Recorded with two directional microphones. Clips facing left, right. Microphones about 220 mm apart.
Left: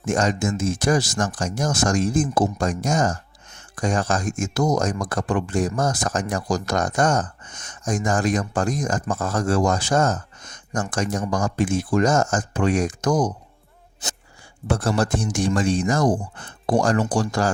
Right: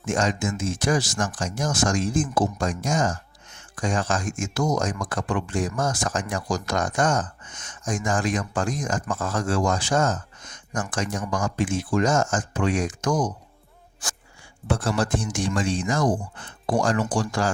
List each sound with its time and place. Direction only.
0.0 s speech: 40° left (ahead or behind)
14.0 s a sound: 20° left (ahead or behind)
14.7 s speech: 40° left (ahead or behind)